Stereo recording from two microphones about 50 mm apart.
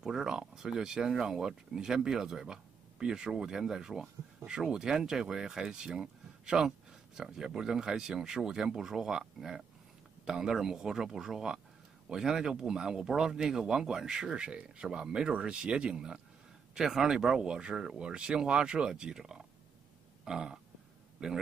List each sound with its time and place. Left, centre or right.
0.0 s speech: centre
14.3 s speech: centre
20.2 s burping: centre
21.2 s speech: centre